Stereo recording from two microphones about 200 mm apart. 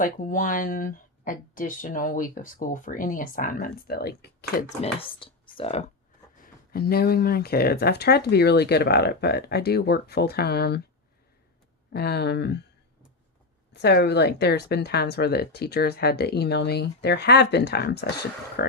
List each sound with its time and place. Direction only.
0.0 s speech: 40° left (ahead or behind)
4.8 s speech: 25° left (ahead or behind)
6.4 s speech: 50° left (ahead or behind)
11.9 s speech: 55° left (ahead or behind)
13.7 s speech: 55° left (ahead or behind)